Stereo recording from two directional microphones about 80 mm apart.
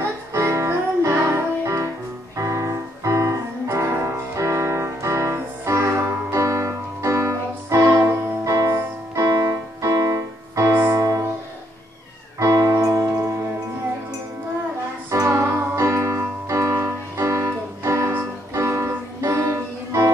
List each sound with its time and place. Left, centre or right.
0.3 s music: right
12.4 s music: right
15.0 s music: right